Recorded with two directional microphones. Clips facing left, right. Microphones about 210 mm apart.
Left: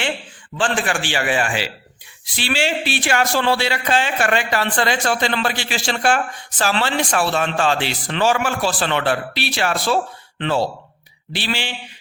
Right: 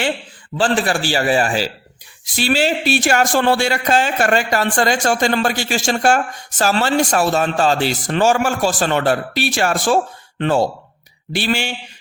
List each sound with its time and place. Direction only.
0.5 s a man's voice: 35° right (ahead or behind)